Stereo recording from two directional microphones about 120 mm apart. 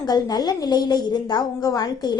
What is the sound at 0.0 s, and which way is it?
A woman's voice, 35° left (ahead or behind).